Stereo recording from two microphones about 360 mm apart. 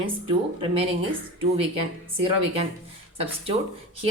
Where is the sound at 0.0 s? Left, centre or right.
Centre.